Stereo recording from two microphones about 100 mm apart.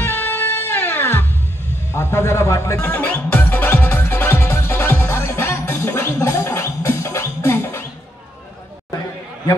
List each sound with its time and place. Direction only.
0.0 s music: 20° left (ahead or behind)